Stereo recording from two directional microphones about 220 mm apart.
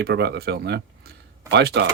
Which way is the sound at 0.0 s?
50° right (ahead or behind).